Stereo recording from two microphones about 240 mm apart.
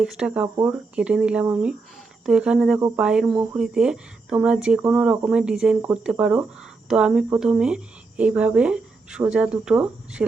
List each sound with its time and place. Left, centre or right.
0.0 s speech: centre